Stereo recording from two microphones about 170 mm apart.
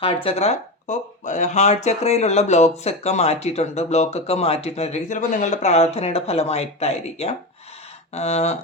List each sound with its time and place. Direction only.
0.0 s speech: 30° left (ahead or behind)